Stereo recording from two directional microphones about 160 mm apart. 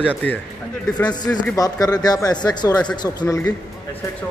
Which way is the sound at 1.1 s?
25° left (ahead or behind).